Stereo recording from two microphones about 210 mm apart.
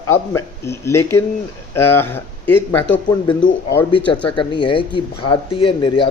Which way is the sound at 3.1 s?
20° left (ahead or behind).